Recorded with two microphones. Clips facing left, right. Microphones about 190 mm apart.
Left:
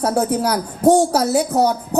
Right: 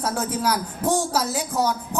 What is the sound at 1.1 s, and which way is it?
Speech, 65° left (ahead or behind).